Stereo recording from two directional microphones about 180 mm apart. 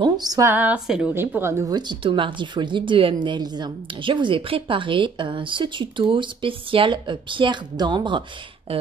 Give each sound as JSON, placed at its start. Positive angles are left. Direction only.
{"t": 0.0, "sound": "a woman's voice", "side_deg": -20}